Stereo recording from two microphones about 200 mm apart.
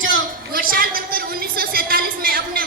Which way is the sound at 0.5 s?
45° right (ahead or behind).